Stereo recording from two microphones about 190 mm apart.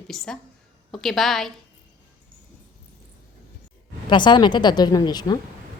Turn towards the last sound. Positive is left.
turn(degrees=20)  # may be behind; listen again after turning